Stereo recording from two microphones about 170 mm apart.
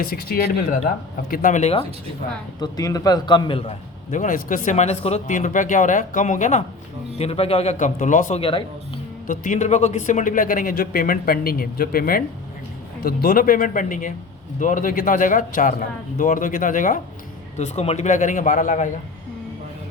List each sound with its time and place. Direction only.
0.0 s speech: 60° left (ahead or behind)
1.3 s speech: 50° left (ahead or behind)
2.6 s a man's voice: 20° left (ahead or behind)
4.1 s a man's voice: 50° left (ahead or behind)
8.4 s a man's voice: 30° left (ahead or behind)
9.2 s speech: 50° left (ahead or behind)
17.6 s speech: 40° left (ahead or behind)